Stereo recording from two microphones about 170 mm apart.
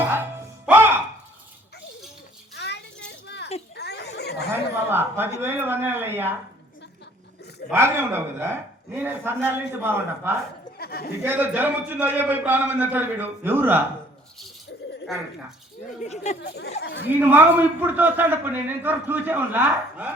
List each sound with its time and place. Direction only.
0.6 s music: 10° right (ahead or behind)
2.6 s a sound: 80° left
3.8 s a sound: 75° left (ahead or behind)
4.9 s a sound: 15° right (ahead or behind)
5.4 s a man's voice: 10° right (ahead or behind)
7.7 s a man's voice: 15° right (ahead or behind)
10.8 s a man's voice: 65° left (ahead or behind)
11.2 s a man's voice: 10° right (ahead or behind)
15.9 s speech: 45° left (ahead or behind)
16.8 s speech: 90° left
17.1 s a man's voice: 10° right (ahead or behind)